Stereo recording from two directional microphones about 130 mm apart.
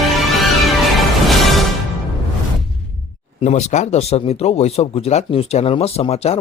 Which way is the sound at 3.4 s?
60° left (ahead or behind).